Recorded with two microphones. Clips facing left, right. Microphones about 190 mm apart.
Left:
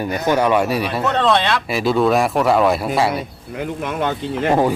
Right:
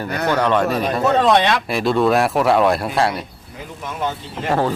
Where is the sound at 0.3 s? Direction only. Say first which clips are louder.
Left 1 dB; 10° left (ahead or behind).